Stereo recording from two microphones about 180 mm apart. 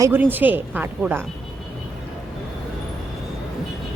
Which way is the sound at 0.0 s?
10° right (ahead or behind).